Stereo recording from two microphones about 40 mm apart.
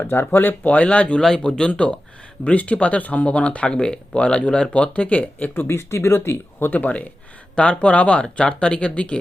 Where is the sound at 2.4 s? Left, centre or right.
Left.